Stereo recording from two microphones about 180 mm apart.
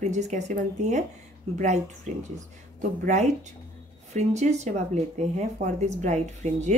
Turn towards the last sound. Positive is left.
turn(degrees=-40)  # may be behind; listen again after turning